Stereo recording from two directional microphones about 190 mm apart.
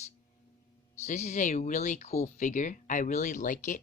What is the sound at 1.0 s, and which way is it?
Speech, 35° left (ahead or behind).